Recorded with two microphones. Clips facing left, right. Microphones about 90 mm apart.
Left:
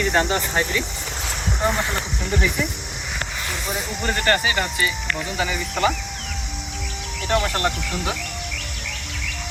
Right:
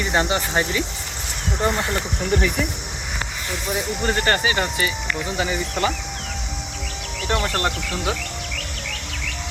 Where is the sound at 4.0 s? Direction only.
25° right (ahead or behind).